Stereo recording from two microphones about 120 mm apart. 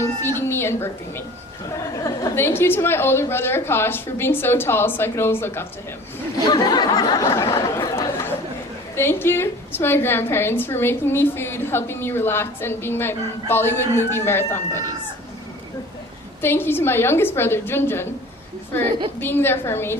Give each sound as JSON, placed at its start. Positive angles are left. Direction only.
{"t": 0.0, "sound": "a woman's voice", "side_deg": 20}
{"t": 6.4, "sound": "speech", "side_deg": 35}
{"t": 7.3, "sound": "chatter", "side_deg": 25}
{"t": 9.0, "sound": "a woman's voice", "side_deg": 20}
{"t": 16.4, "sound": "a woman's voice", "side_deg": 20}
{"t": 19.2, "sound": "a woman's voice", "side_deg": 20}